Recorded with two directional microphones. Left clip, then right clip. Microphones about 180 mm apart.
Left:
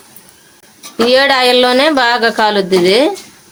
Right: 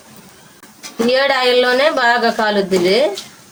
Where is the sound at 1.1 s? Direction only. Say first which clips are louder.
Left 4 dB; 60° left (ahead or behind).